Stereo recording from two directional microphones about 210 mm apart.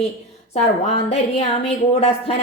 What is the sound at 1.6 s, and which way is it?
Speech, 30° left (ahead or behind).